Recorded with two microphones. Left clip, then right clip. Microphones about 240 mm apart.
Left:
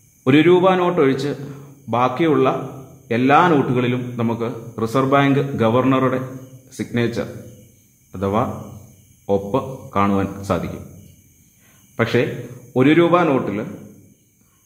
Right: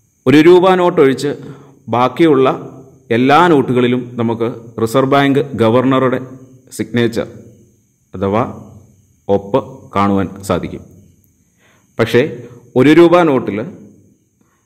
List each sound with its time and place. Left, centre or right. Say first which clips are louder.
0.2 s a man's voice: right 6 dB; right
11.9 s a man's voice: right 6 dB; right